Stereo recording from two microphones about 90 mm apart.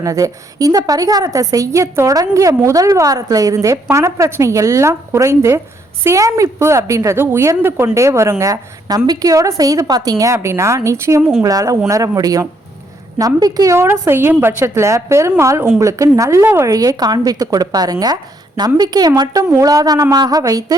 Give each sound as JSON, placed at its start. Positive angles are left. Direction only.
{"t": 0.0, "sound": "a woman's voice", "side_deg": -40}
{"t": 13.7, "sound": "a woman's voice", "side_deg": -30}